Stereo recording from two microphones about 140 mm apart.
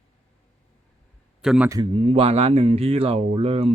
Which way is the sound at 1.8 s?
40° right (ahead or behind).